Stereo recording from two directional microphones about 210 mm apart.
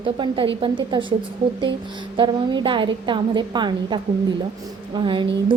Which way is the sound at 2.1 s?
20° right (ahead or behind).